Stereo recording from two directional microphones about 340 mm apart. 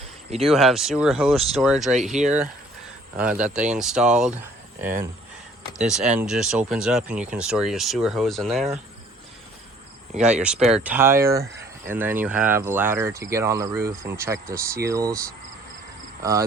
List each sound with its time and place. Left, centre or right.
0.4 s speech: centre
2.2 s speech: centre
3.2 s speech: centre
4.8 s speech: right
5.8 s speech: centre
10.4 s speech: centre
16.2 s speech: centre